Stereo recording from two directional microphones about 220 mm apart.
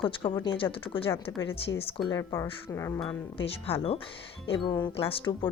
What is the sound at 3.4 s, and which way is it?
Speech, 25° left (ahead or behind).